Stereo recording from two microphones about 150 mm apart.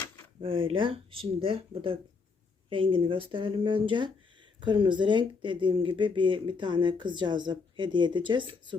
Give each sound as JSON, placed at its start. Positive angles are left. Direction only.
{"t": 0.4, "sound": "speech", "side_deg": -35}